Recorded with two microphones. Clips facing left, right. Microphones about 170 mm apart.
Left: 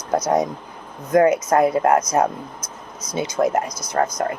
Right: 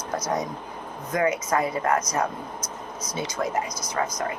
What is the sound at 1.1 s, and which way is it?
Speech, 50° left (ahead or behind).